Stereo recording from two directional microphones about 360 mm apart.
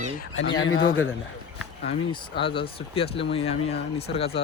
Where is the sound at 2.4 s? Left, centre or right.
Centre.